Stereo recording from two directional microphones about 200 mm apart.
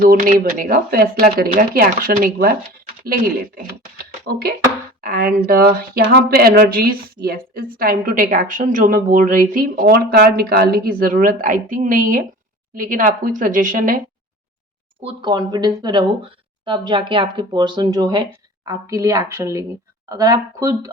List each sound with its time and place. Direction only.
0.0 s speech: 45° right (ahead or behind)
4.3 s a woman's voice: 50° right (ahead or behind)
15.0 s speech: 25° right (ahead or behind)